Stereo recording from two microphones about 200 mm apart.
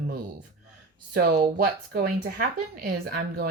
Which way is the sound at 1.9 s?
50° right (ahead or behind).